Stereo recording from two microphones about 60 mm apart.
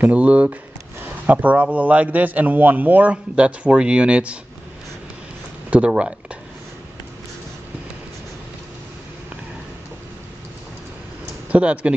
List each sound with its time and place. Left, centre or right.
0.0 s a man's voice: right
5.7 s a man's voice: centre
11.4 s speech: right